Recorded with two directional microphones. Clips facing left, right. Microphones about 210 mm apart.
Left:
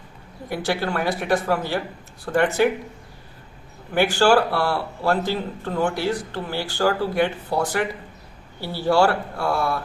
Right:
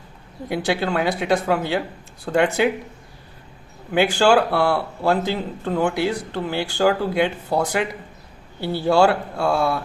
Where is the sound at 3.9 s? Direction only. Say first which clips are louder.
Right 1 dB; 20° right (ahead or behind).